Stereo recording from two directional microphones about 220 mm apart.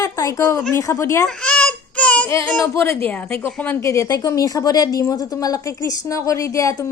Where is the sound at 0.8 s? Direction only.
15° left (ahead or behind).